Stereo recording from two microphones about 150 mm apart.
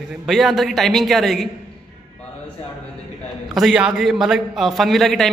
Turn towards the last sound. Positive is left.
turn(degrees=0)  # may be behind; listen again after turning